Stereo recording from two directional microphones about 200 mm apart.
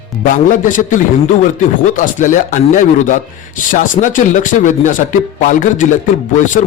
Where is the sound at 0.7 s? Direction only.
40° left (ahead or behind).